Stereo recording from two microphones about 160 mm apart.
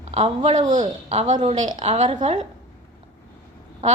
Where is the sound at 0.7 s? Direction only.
50° right (ahead or behind).